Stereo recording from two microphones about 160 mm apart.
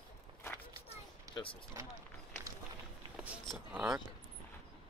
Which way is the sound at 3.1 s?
5° right (ahead or behind).